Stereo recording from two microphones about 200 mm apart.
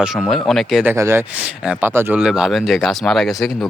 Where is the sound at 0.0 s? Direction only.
Centre (ahead or behind).